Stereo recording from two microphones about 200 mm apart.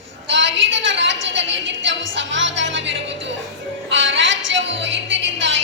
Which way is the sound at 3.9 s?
65° right (ahead or behind).